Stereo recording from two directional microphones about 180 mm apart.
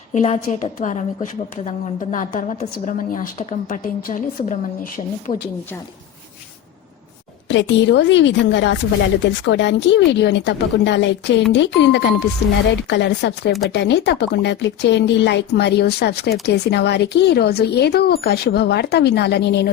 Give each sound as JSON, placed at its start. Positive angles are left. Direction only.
{"t": 0.1, "sound": "a woman's voice", "side_deg": 40}
{"t": 7.4, "sound": "a woman's voice", "side_deg": 85}